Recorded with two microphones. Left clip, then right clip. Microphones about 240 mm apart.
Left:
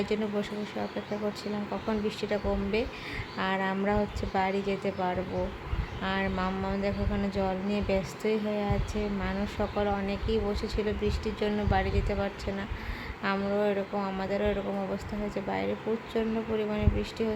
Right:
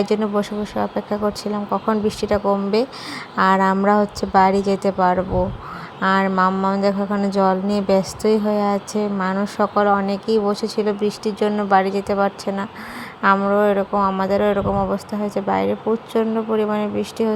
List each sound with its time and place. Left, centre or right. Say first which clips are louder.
0.0 s a woman's voice: right 11 dB; right